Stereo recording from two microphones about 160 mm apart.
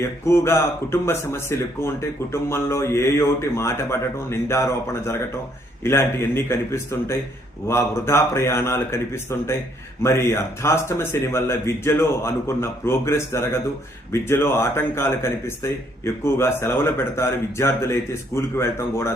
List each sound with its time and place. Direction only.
0.0 s speech: 15° left (ahead or behind)